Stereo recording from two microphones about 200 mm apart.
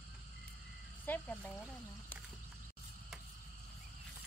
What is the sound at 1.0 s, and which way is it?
Speech, 10° left (ahead or behind).